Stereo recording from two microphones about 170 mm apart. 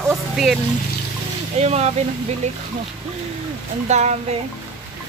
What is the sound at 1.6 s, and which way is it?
Speech, 40° right (ahead or behind).